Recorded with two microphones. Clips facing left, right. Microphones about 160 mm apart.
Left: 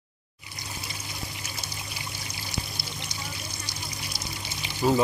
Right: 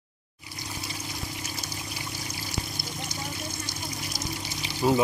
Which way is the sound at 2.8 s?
45° right (ahead or behind).